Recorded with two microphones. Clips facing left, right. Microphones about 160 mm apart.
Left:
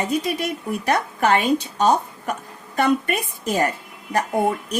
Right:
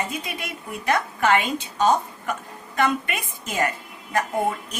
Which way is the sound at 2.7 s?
35° left (ahead or behind).